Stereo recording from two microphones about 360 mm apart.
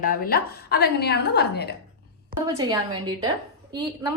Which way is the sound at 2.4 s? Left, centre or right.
Centre.